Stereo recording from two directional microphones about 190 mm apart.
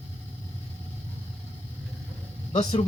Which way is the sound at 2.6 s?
25° left (ahead or behind).